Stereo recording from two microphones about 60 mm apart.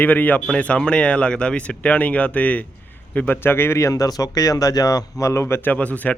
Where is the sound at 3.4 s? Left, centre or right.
Left.